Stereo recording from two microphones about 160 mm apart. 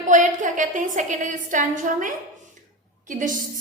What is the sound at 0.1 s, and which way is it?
A woman's voice, 50° right (ahead or behind).